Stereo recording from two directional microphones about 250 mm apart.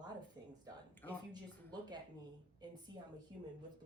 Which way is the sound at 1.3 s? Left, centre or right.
Centre.